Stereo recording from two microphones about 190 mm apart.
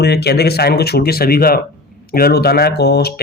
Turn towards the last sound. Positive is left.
turn(degrees=60)  # may be behind; listen again after turning